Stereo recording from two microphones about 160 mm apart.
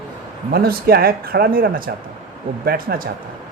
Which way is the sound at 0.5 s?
70° right (ahead or behind).